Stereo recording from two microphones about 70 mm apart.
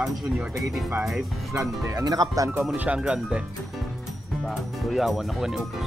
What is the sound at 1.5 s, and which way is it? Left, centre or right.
Speech, right.